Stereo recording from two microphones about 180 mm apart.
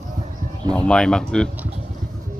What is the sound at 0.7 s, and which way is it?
Speech, 5° left (ahead or behind).